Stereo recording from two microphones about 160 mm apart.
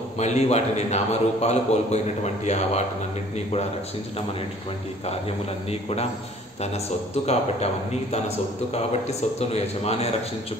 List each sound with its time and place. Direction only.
0.2 s a man's voice: 45° left (ahead or behind)
5.7 s a man's voice: 40° left (ahead or behind)
7.2 s a man's voice: 40° left (ahead or behind)